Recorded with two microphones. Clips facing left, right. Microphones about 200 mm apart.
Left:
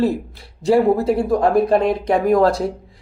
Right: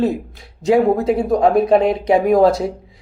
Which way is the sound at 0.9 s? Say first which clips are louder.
Right 1 dB; 5° left (ahead or behind).